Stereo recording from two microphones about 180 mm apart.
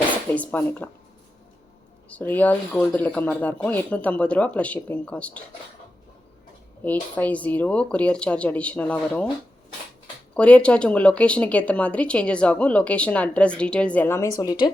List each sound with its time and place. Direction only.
0.0 s speech: 10° left (ahead or behind)
2.0 s speech: 10° left (ahead or behind)
6.8 s speech: 10° left (ahead or behind)
10.3 s speech: 5° left (ahead or behind)
14.3 s speech: 25° left (ahead or behind)